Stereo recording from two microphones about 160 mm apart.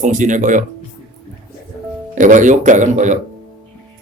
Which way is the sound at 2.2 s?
50° right (ahead or behind).